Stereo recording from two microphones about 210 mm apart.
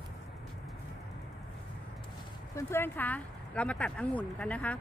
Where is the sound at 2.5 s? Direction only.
10° left (ahead or behind).